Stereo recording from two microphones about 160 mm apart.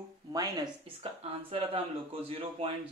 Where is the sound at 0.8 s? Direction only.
35° right (ahead or behind).